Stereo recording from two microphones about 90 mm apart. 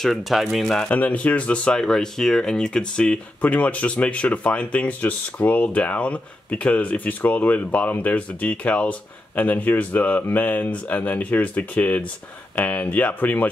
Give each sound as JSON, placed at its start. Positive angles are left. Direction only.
{"t": 0.0, "sound": "speech", "side_deg": 0}
{"t": 0.8, "sound": "speech", "side_deg": 20}